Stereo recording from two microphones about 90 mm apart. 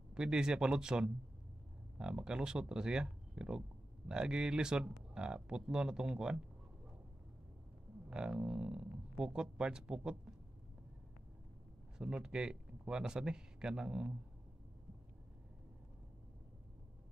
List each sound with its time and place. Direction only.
0.1 s speech: 10° right (ahead or behind)
8.1 s speech: 10° right (ahead or behind)
12.0 s speech: 10° right (ahead or behind)